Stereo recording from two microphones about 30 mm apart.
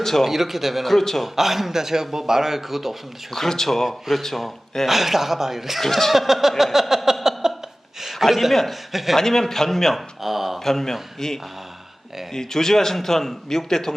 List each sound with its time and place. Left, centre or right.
0.0 s a man's voice: centre
0.3 s a man's voice: centre
0.9 s speech: centre
1.2 s a man's voice: centre
3.3 s speech: centre
4.9 s a man's voice: centre
5.8 s speech: centre
6.1 s a man's voice: centre
6.6 s a sound: centre
8.2 s a man's voice: centre
9.1 s speech: centre
9.9 s a man's voice: centre
10.6 s speech: centre
12.3 s speech: centre